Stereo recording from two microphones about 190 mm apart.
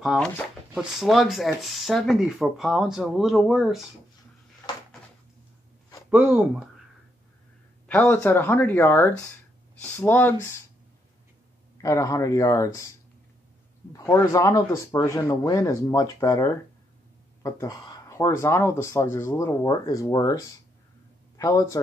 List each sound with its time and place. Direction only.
0.0 s speech: centre (ahead or behind)
6.0 s speech: 10° right (ahead or behind)
7.9 s speech: 10° left (ahead or behind)
11.8 s speech: 15° left (ahead or behind)
13.9 s speech: 10° left (ahead or behind)